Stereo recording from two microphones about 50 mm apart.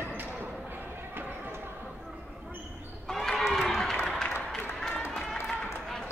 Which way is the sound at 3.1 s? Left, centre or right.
Centre.